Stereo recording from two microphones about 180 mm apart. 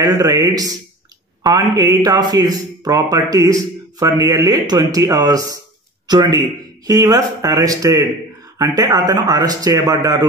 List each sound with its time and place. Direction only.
0.0 s a man's voice: 20° right (ahead or behind)